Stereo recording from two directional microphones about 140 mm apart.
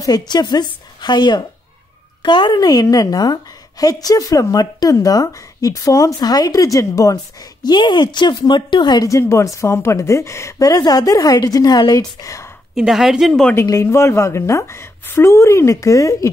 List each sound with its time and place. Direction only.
0.3 s a woman's voice: 30° left (ahead or behind)
12.7 s a woman's voice: 5° right (ahead or behind)
13.7 s a woman's voice: 20° left (ahead or behind)